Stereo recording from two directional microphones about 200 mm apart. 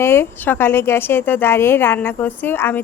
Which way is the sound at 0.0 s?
10° left (ahead or behind).